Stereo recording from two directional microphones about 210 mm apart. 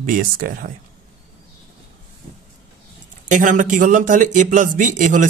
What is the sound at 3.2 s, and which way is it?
A man's voice, 35° right (ahead or behind).